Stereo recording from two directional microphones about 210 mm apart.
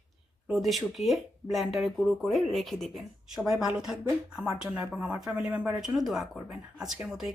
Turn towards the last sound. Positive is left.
turn(degrees=-5)  # may be behind; listen again after turning